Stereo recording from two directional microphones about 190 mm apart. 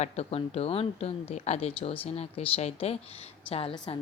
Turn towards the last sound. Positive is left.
turn(degrees=30)  # may be behind; listen again after turning